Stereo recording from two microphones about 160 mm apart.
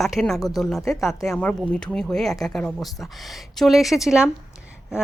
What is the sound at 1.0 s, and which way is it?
Speech, 20° left (ahead or behind).